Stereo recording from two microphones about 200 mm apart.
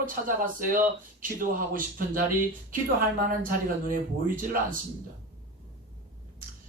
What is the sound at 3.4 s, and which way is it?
Speech, 45° right (ahead or behind).